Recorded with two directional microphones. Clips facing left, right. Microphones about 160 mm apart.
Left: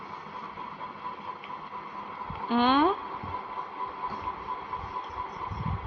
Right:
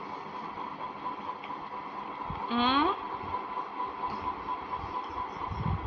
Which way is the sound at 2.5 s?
55° left (ahead or behind).